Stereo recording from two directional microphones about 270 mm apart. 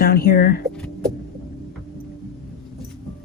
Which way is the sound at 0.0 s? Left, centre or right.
Left.